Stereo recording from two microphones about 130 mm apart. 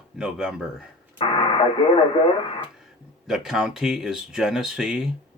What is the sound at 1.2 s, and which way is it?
Speech, 40° left (ahead or behind).